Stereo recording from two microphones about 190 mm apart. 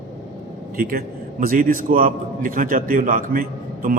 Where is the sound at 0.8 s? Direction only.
50° right (ahead or behind).